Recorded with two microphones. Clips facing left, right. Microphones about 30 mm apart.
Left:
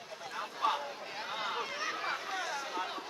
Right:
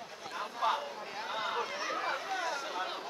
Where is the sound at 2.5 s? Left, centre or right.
Centre.